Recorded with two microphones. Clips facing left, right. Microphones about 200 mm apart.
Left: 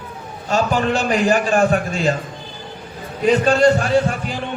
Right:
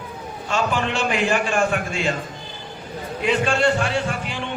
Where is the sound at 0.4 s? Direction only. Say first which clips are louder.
Left 5 dB; 40° left (ahead or behind).